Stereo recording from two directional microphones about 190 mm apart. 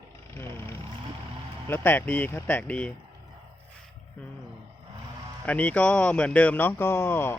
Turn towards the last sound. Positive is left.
turn(degrees=10)  # may be behind; listen again after turning